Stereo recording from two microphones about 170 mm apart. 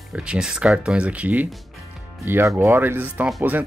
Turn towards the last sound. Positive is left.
turn(degrees=-5)  # may be behind; listen again after turning